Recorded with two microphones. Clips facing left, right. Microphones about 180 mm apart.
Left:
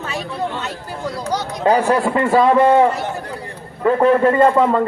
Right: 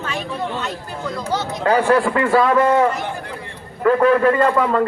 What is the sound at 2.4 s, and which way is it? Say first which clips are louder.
A man's voice: left 3 dB; 30° left (ahead or behind).